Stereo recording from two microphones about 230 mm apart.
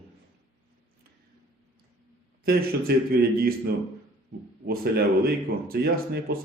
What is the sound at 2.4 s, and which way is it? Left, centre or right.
Speech, right.